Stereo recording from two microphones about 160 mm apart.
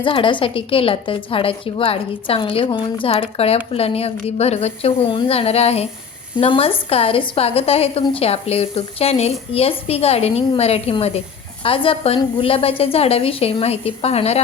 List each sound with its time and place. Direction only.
0.0 s a woman's voice: 30° left (ahead or behind)